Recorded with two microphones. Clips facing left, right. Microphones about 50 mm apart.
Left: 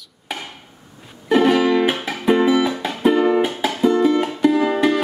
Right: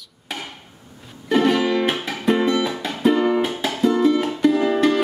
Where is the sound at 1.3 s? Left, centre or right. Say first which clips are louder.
Left 3 dB; centre.